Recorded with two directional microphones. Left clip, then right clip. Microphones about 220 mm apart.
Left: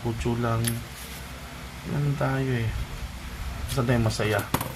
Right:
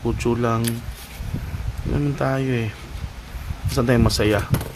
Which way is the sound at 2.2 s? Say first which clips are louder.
Right 4 dB; 45° right (ahead or behind).